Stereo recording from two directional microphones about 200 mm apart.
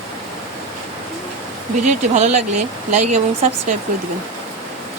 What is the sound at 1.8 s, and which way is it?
Speech, 35° right (ahead or behind).